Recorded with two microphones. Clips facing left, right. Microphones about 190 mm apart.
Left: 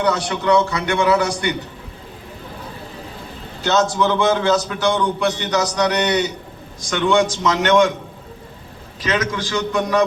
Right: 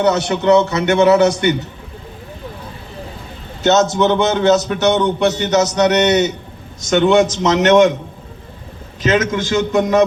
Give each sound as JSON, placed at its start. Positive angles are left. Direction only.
{"t": 0.0, "sound": "a man's voice", "side_deg": -25}
{"t": 3.6, "sound": "a man's voice", "side_deg": -20}
{"t": 9.0, "sound": "a man's voice", "side_deg": -25}